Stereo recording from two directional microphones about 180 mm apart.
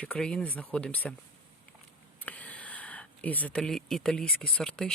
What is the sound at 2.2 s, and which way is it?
Speech, 10° left (ahead or behind).